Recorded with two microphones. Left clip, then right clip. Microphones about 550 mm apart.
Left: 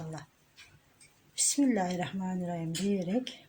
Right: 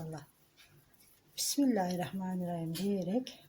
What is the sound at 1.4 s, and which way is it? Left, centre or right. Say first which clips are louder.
Speech: left 3 dB; right.